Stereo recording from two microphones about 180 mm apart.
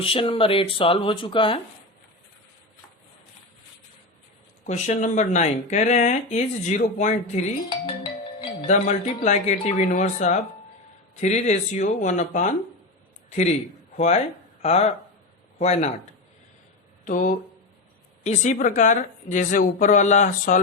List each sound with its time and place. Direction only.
0.0 s speech: 30° left (ahead or behind)
4.6 s speech: 45° left (ahead or behind)
8.6 s speech: 40° left (ahead or behind)
13.9 s speech: 40° left (ahead or behind)
17.1 s speech: 45° left (ahead or behind)